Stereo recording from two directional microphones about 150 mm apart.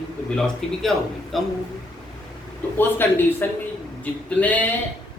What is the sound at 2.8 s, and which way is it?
Speech, 15° left (ahead or behind).